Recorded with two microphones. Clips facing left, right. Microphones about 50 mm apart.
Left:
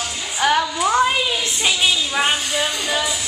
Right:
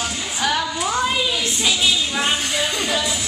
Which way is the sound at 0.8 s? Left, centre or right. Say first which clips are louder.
Left 4 dB; centre.